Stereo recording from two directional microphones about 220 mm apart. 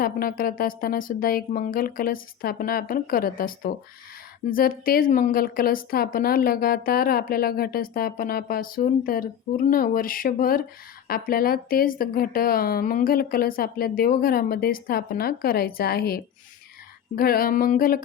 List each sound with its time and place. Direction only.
0.0 s a woman's voice: 40° left (ahead or behind)